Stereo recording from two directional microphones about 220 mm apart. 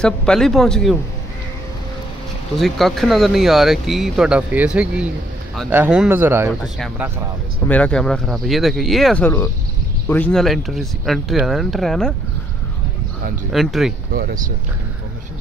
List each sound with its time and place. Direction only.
0.0 s speech: 5° left (ahead or behind)
2.5 s speech: centre (ahead or behind)
13.5 s speech: centre (ahead or behind)
14.1 s speech: 40° right (ahead or behind)